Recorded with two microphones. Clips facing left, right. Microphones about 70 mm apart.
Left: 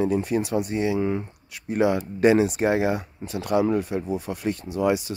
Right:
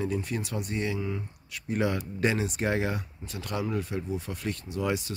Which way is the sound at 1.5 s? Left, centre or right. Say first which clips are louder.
Left 7 dB; centre.